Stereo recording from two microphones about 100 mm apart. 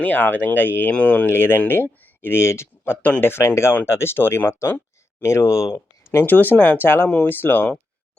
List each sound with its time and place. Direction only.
0.0 s speech: 15° left (ahead or behind)